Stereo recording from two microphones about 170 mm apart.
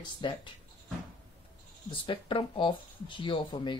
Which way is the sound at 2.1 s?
30° left (ahead or behind).